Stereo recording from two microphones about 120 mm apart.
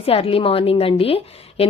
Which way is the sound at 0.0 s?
55° left (ahead or behind).